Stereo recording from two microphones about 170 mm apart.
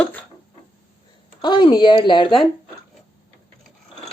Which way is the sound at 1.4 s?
25° left (ahead or behind).